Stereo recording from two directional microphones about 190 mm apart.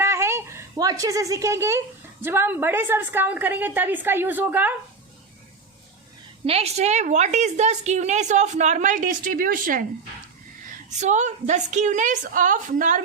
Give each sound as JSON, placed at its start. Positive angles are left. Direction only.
{"t": 0.0, "sound": "a sound", "side_deg": -15}
{"t": 2.2, "sound": "a woman's voice", "side_deg": -10}
{"t": 6.4, "sound": "a woman's voice", "side_deg": -35}
{"t": 10.8, "sound": "a woman's voice", "side_deg": -40}